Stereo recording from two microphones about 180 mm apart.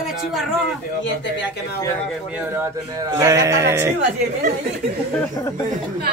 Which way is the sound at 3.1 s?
20° right (ahead or behind).